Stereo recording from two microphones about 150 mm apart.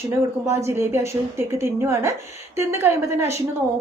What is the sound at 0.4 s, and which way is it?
A woman's voice, 15° right (ahead or behind).